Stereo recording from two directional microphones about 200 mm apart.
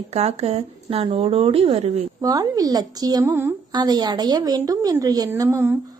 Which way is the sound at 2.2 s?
20° right (ahead or behind).